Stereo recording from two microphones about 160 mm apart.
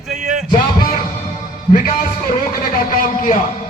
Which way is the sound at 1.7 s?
65° left (ahead or behind).